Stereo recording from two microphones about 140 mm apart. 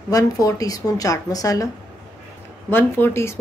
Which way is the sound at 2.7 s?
15° left (ahead or behind).